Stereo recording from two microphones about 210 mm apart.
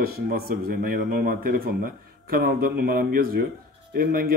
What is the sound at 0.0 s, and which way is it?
Speech, 45° right (ahead or behind).